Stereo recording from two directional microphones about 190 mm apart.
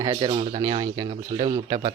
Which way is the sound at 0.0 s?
25° right (ahead or behind).